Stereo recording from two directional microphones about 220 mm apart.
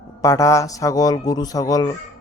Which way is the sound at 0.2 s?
15° left (ahead or behind).